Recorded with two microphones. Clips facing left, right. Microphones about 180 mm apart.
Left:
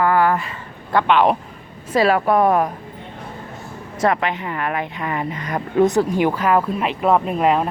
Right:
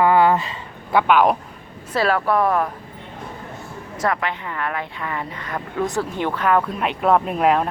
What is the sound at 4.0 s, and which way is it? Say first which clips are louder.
Speech: left 4 dB; 20° left (ahead or behind).